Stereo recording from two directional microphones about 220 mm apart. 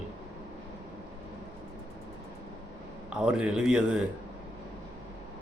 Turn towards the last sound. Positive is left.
turn(degrees=-5)  # may be behind; listen again after turning